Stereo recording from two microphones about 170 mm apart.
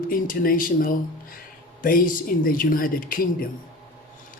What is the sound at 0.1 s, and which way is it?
Speech, 55° left (ahead or behind).